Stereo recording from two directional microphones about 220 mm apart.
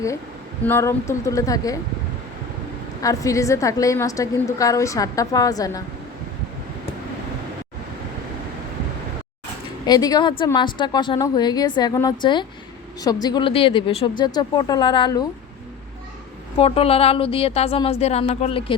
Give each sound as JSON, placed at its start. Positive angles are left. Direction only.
{"t": 0.6, "sound": "a woman's voice", "side_deg": 10}
{"t": 3.0, "sound": "a woman's voice", "side_deg": 15}
{"t": 9.8, "sound": "a woman's voice", "side_deg": 20}
{"t": 16.6, "sound": "a woman's voice", "side_deg": 25}